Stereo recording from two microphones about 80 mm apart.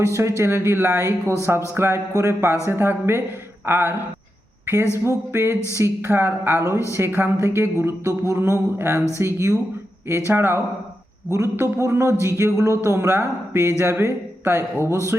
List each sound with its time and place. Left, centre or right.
0.0 s a woman's voice: right